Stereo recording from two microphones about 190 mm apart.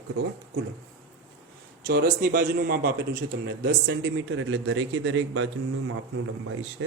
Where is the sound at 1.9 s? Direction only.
55° right (ahead or behind); by 4.1 s 70° right (ahead or behind).